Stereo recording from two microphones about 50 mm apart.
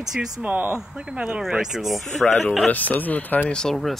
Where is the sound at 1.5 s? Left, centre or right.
Centre.